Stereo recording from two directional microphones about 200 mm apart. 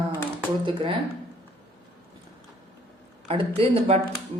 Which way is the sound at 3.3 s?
30° right (ahead or behind).